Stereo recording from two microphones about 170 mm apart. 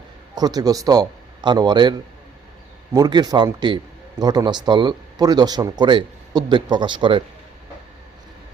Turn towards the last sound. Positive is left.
turn(degrees=-30)  # may be behind; listen again after turning